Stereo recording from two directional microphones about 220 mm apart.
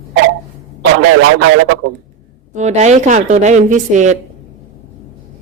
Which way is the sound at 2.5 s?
30° right (ahead or behind).